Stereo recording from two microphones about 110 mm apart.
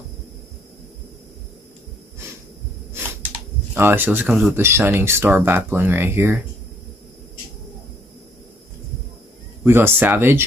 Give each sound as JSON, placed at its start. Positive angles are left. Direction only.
{"t": 3.7, "sound": "speech", "side_deg": -20}
{"t": 4.3, "sound": "speech", "side_deg": -10}
{"t": 4.6, "sound": "speech", "side_deg": -20}
{"t": 9.7, "sound": "speech", "side_deg": -20}